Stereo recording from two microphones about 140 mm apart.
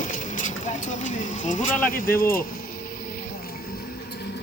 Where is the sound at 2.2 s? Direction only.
90° left.